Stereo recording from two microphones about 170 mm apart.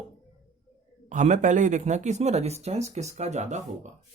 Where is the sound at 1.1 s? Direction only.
45° right (ahead or behind).